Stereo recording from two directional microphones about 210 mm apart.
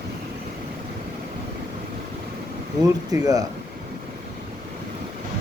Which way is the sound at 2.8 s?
15° right (ahead or behind).